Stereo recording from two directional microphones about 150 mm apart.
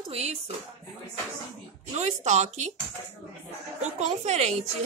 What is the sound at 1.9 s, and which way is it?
Speech, 50° right (ahead or behind).